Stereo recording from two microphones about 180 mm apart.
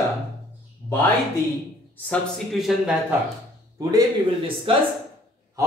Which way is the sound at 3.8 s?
20° right (ahead or behind).